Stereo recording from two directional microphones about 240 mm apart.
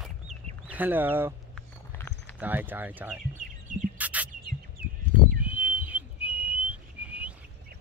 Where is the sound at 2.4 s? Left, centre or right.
Centre.